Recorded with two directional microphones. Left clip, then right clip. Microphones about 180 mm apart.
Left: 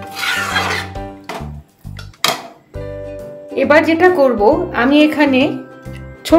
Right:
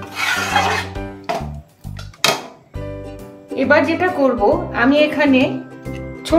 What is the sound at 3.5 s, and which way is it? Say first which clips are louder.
A woman's voice: left 3 dB; 55° left (ahead or behind).